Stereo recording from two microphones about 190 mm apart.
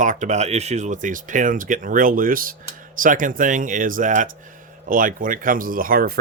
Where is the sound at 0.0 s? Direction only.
40° right (ahead or behind).